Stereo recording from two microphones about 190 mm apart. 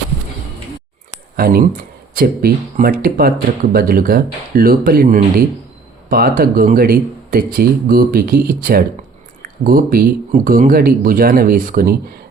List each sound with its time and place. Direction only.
1.4 s speech: 50° right (ahead or behind)